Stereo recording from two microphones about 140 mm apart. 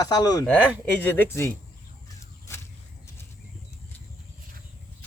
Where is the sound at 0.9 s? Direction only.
10° left (ahead or behind).